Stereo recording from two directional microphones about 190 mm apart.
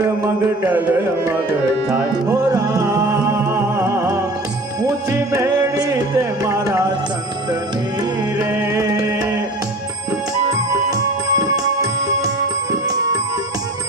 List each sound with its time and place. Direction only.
0.0 s music: 15° right (ahead or behind)
2.5 s music: 20° right (ahead or behind)
5.3 s music: 15° right (ahead or behind)
8.4 s music: 15° right (ahead or behind)
10.5 s music: 20° right (ahead or behind)